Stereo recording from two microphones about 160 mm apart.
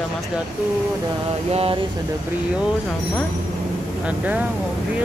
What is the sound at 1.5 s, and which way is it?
Speech, 40° right (ahead or behind).